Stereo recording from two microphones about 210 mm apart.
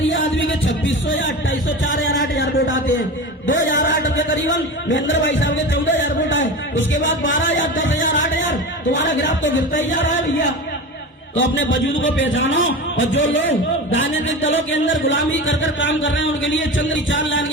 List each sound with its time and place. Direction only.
0.1 s music: 60° left (ahead or behind)
3.8 s music: 60° left (ahead or behind)
8.1 s a sound: 60° left (ahead or behind)
11.3 s a man's voice: 60° left (ahead or behind)